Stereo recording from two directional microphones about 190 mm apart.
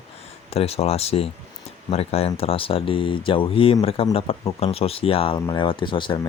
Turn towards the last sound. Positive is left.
turn(degrees=25)  # may be behind; listen again after turning